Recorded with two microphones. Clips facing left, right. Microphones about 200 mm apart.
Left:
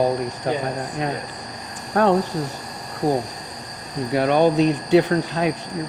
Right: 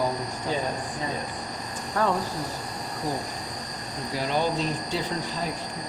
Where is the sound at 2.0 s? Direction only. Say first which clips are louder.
Left 7 dB; 65° left (ahead or behind).